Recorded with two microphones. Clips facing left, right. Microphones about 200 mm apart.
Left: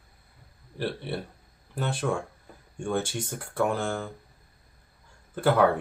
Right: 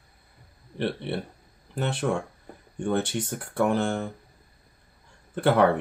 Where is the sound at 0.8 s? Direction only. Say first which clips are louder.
Right 3 dB; 25° right (ahead or behind).